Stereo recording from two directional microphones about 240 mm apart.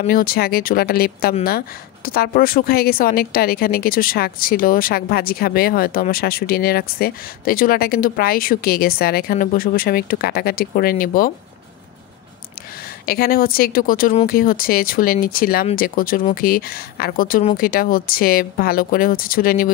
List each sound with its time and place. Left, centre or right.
0.0 s a woman's voice: left
13.0 s a woman's voice: left